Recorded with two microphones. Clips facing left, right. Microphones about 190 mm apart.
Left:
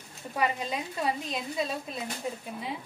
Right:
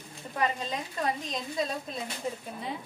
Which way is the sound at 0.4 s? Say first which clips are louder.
Left 1 dB; 10° left (ahead or behind).